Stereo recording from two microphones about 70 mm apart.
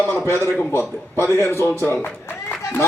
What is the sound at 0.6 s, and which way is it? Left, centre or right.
A man's voice, left.